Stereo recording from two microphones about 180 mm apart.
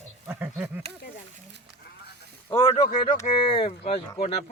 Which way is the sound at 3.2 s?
30° left (ahead or behind).